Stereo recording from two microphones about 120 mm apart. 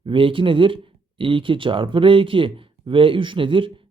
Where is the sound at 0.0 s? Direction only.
45° right (ahead or behind).